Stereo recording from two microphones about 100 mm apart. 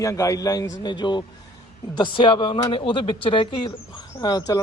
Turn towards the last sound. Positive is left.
turn(degrees=45)  # may be behind; listen again after turning